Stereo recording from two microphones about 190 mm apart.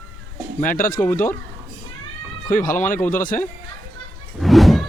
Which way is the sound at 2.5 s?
45° left (ahead or behind).